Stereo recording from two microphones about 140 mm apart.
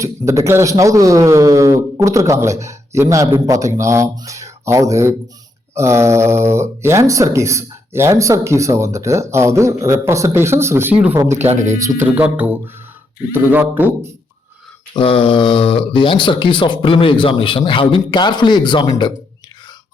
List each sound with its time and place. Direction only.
0.0 s speech: 20° right (ahead or behind)
11.3 s speech: 55° right (ahead or behind)
11.8 s speech: 15° right (ahead or behind)
14.9 s speech: 40° left (ahead or behind)